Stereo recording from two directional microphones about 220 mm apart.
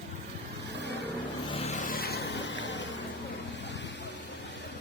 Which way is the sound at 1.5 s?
30° left (ahead or behind).